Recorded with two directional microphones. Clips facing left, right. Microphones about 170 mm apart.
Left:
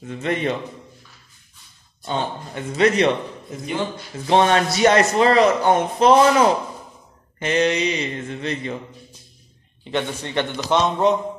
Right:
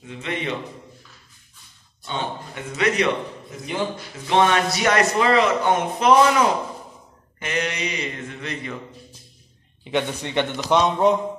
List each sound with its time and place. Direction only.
0.0 s a man's voice: 45° left (ahead or behind)
2.0 s a man's voice: 35° left (ahead or behind)
4.3 s a man's voice: 35° left (ahead or behind)
7.3 s mantra: 30° left (ahead or behind)
9.8 s a man's voice: 15° right (ahead or behind)
10.5 s a man's voice: centre (ahead or behind)